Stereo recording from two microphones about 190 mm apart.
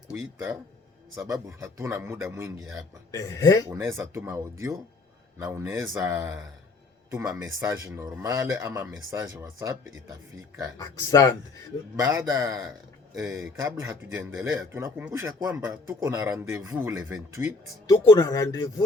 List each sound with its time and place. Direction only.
1.1 s speech: 15° right (ahead or behind)
3.1 s speech: 15° left (ahead or behind)
3.7 s speech: 15° right (ahead or behind)
10.8 s speech: 20° left (ahead or behind)
11.9 s speech: 15° right (ahead or behind)
17.8 s speech: 20° left (ahead or behind)